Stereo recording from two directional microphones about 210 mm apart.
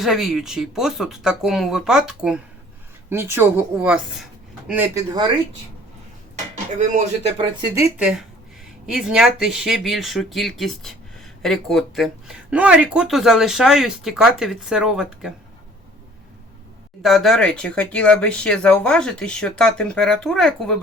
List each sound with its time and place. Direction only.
0.0 s speech: centre (ahead or behind)
6.7 s speech: 35° right (ahead or behind)
7.8 s speech: 5° right (ahead or behind)
17.0 s speech: centre (ahead or behind)